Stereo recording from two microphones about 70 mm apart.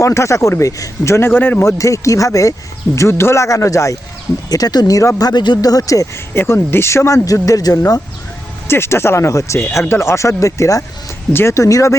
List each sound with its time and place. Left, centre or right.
0.0 s speech: left
1.6 s speech: left
4.4 s speech: left
5.1 s speech: left
6.3 s speech: left
7.4 s speech: left
8.6 s speech: left